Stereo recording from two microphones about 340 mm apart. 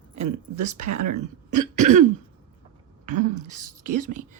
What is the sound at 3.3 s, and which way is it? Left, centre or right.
Speech, right.